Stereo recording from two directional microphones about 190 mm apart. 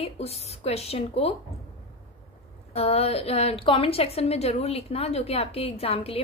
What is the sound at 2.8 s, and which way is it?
A woman's voice, 35° left (ahead or behind).